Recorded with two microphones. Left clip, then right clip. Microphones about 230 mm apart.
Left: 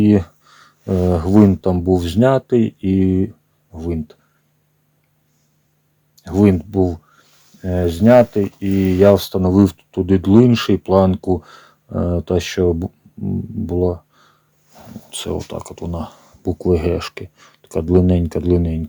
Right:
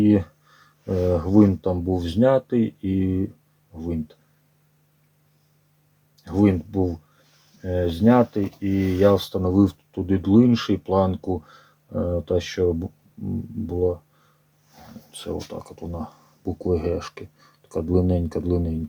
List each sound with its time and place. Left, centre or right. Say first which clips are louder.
0.0 s speech: left 4 dB; left
6.2 s speech: left 5 dB; left
15.1 s speech: left 7 dB; left